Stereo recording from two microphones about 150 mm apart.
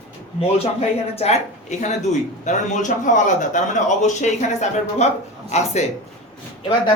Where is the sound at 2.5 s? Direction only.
55° left (ahead or behind).